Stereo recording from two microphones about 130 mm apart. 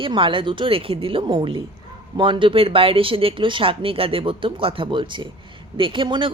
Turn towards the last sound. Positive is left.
turn(degrees=-40)  # may be behind; listen again after turning